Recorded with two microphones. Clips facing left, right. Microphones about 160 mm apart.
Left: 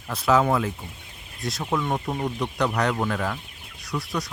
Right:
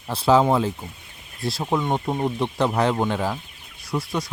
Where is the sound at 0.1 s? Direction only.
30° right (ahead or behind).